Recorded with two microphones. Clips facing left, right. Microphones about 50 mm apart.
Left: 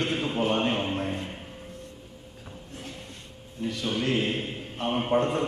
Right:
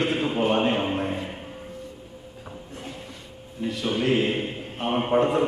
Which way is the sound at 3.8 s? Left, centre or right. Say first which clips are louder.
Right 4 dB; centre.